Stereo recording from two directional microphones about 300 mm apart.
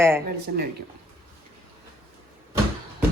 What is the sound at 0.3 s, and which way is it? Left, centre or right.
Speech, right.